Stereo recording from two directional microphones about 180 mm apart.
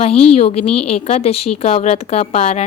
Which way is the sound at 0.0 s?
35° left (ahead or behind).